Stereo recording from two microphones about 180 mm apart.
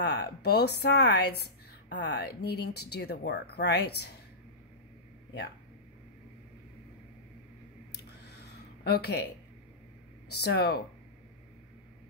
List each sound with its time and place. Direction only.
0.0 s speech: 65° left (ahead or behind)
7.9 s a sound: 65° left (ahead or behind)
10.3 s speech: 65° left (ahead or behind)